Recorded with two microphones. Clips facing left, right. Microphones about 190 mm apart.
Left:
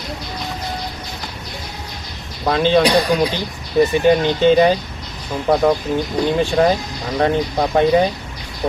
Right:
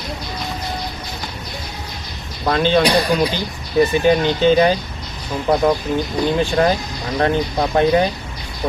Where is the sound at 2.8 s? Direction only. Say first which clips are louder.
Left 1 dB; 15° left (ahead or behind).